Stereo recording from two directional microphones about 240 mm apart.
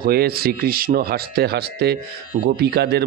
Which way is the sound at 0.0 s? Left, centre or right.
Right.